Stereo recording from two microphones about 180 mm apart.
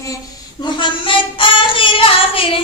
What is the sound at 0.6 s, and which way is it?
Child singing, 25° left (ahead or behind).